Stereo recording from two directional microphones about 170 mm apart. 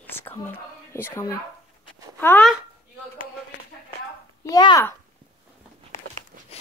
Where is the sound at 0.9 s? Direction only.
15° left (ahead or behind).